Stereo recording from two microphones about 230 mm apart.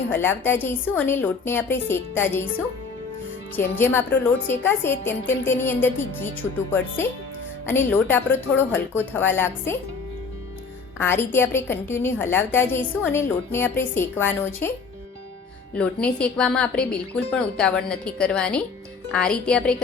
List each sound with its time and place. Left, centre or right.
0.1 s a woman's voice: centre
3.5 s a woman's voice: centre
11.0 s a woman's voice: centre
15.7 s speech: centre